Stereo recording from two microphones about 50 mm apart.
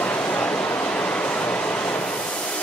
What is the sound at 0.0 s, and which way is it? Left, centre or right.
Train, left.